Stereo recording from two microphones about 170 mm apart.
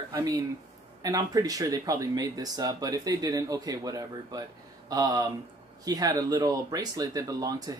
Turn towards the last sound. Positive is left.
turn(degrees=-20)  # may be behind; listen again after turning